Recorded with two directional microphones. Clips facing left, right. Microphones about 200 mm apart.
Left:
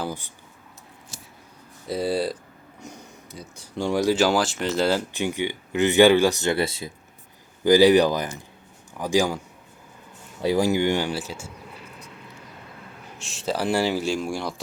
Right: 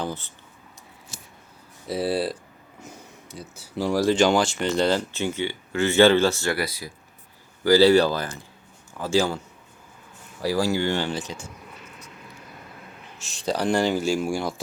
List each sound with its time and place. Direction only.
0.0 s speech: 10° left (ahead or behind)
1.9 s speech: centre (ahead or behind)
10.4 s speech: 20° left (ahead or behind)
11.7 s vehicle: 35° left (ahead or behind)
13.1 s speech: centre (ahead or behind)